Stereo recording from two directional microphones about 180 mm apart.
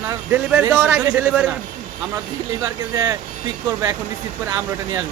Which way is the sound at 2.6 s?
20° right (ahead or behind).